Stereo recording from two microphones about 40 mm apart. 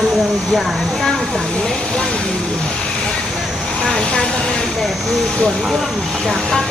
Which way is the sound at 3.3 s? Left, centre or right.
Centre.